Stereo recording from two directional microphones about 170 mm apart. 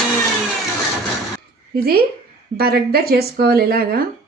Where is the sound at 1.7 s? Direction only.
65° right (ahead or behind).